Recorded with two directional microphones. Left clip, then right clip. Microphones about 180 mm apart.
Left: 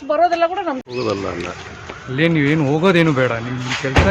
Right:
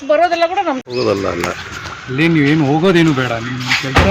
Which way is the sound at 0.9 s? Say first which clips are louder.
Right 6 dB; 15° right (ahead or behind).